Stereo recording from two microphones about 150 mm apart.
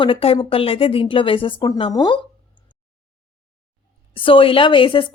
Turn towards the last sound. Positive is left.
turn(degrees=35)  # may be behind; listen again after turning